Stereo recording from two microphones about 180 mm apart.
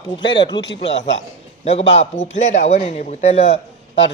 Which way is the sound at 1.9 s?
40° left (ahead or behind).